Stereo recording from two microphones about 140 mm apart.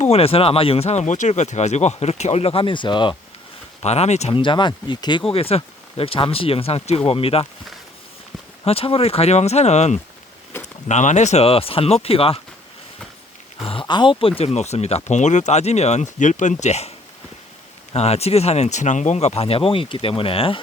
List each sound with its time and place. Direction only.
0.0 s speech: 45° left (ahead or behind)
3.8 s speech: 50° left (ahead or behind)
4.4 s speech: 35° left (ahead or behind)
8.6 s speech: 45° left (ahead or behind)
13.6 s speech: 40° left (ahead or behind)
17.9 s speech: 50° left (ahead or behind)